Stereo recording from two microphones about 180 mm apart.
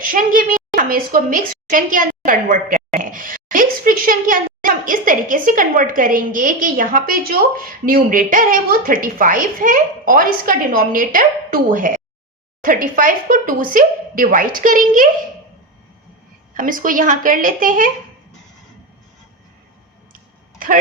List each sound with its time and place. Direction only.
0.0 s a woman's voice: 50° right (ahead or behind)
16.6 s a woman's voice: 50° right (ahead or behind)